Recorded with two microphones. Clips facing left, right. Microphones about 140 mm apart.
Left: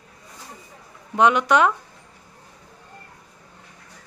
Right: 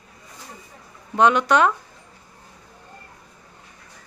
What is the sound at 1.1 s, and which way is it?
Speech, 15° left (ahead or behind).